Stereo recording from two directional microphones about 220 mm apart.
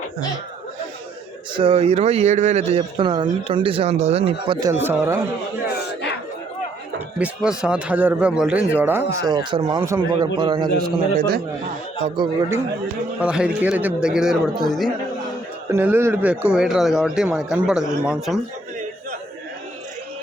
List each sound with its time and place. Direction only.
1.5 s speech: 25° right (ahead or behind)
4.7 s a man's voice: 10° right (ahead or behind)
5.6 s a sound: 50° left (ahead or behind)
7.2 s speech: 5° right (ahead or behind); by 10.7 s 20° right (ahead or behind)
12.0 s speech: 20° right (ahead or behind)
13.1 s speech: 5° right (ahead or behind)